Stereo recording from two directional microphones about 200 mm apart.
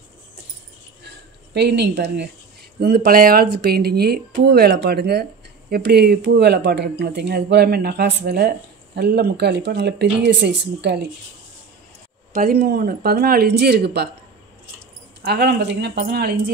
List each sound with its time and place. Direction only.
1.0 s a sound: 55° right (ahead or behind)
2.8 s speech: 50° right (ahead or behind)
12.3 s speech: 45° right (ahead or behind)
15.2 s speech: 55° right (ahead or behind)